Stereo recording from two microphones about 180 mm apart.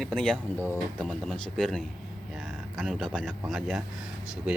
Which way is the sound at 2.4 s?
Centre (ahead or behind).